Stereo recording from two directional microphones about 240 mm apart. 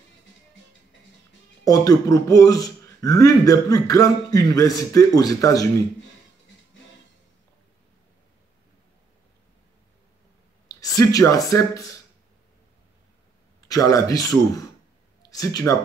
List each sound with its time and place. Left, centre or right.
1.6 s speech: centre
10.7 s speech: centre
13.7 s speech: centre